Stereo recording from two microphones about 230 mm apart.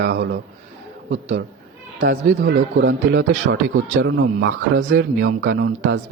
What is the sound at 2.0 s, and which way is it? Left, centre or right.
A man's voice, right.